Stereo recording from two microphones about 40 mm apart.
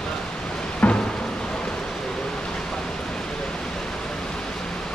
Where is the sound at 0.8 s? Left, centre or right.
Left.